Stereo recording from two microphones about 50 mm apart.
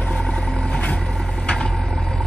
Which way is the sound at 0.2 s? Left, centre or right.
Centre.